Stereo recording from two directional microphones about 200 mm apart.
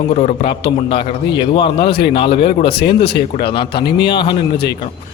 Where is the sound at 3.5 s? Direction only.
25° left (ahead or behind).